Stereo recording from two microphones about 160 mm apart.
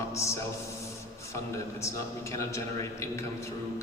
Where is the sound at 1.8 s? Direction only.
20° left (ahead or behind).